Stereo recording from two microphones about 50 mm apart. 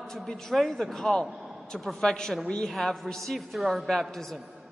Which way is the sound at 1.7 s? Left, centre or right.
Centre.